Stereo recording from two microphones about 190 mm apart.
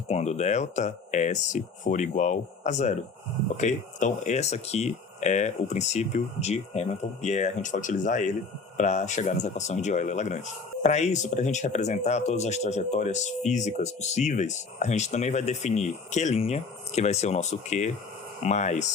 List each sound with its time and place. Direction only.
0.1 s speech: 35° left (ahead or behind)